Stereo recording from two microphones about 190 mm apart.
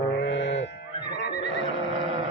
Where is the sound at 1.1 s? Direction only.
65° left (ahead or behind).